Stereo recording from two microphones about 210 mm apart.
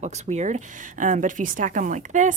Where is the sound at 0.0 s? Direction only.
30° right (ahead or behind).